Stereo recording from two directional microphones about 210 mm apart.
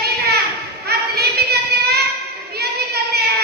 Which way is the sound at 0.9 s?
50° right (ahead or behind).